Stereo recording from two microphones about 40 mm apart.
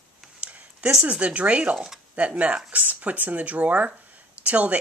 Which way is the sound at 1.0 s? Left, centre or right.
Right.